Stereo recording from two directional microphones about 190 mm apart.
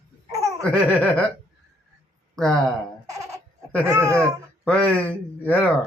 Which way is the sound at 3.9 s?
15° right (ahead or behind).